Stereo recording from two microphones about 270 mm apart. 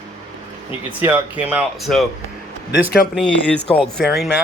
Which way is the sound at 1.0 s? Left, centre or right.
Centre.